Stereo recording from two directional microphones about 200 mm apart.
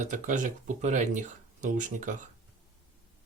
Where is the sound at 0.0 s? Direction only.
40° right (ahead or behind).